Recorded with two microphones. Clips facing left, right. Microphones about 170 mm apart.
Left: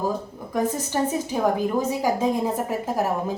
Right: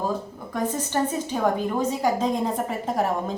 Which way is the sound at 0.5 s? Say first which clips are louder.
Left 1 dB; 10° left (ahead or behind).